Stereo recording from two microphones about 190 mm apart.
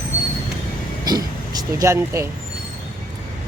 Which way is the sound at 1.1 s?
20° right (ahead or behind).